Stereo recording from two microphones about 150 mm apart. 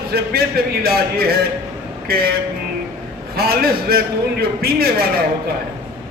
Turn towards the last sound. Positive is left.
turn(degrees=-90)